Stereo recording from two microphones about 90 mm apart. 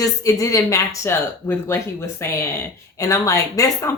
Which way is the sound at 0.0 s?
40° left (ahead or behind).